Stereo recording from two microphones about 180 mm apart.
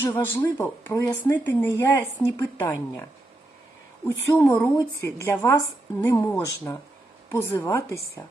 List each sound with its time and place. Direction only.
0.0 s speech: 10° left (ahead or behind)